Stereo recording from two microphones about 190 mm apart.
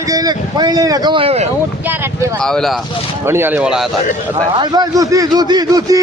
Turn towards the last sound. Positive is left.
turn(degrees=-20)  # may be behind; listen again after turning